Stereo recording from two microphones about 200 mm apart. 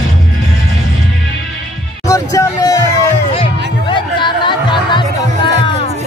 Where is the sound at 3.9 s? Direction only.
25° left (ahead or behind).